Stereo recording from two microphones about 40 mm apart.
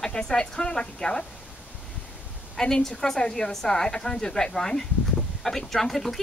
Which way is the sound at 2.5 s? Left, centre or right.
Centre.